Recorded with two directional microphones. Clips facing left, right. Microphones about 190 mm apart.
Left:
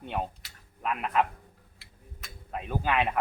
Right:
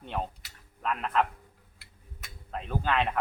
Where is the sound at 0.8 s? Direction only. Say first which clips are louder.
Left 1 dB; 10° left (ahead or behind).